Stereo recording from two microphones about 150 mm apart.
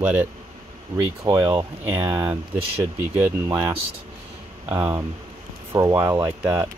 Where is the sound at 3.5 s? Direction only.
25° right (ahead or behind).